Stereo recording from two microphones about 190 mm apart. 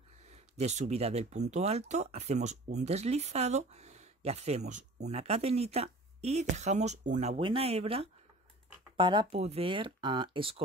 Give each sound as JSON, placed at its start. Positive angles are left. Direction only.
{"t": 0.3, "sound": "speech", "side_deg": -35}